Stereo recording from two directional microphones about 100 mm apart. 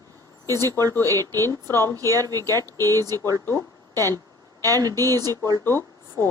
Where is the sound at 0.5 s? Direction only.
40° right (ahead or behind).